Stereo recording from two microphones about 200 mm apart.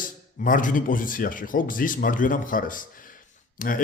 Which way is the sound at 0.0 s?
40° left (ahead or behind).